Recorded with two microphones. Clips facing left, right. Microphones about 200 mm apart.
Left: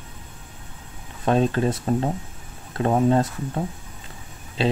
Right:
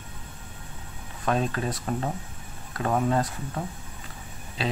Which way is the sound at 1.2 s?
30° left (ahead or behind).